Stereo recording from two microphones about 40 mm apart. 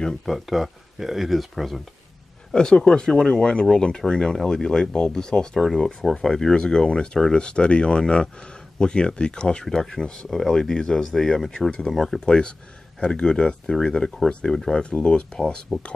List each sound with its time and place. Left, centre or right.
0.2 s speech: centre
2.5 s speech: centre
12.3 s speech: left
14.8 s speech: left